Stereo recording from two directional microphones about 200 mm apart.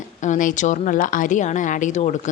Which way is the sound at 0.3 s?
40° left (ahead or behind).